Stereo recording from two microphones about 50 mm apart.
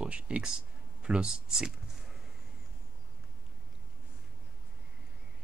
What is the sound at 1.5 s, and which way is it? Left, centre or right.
Computer keyboard, centre.